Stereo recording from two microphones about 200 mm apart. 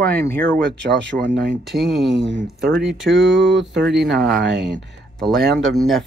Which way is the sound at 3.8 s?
55° right (ahead or behind).